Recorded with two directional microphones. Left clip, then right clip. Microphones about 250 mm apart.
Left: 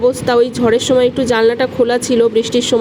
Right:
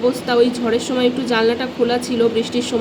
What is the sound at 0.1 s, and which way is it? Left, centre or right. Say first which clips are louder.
Speech: left 3 dB; left.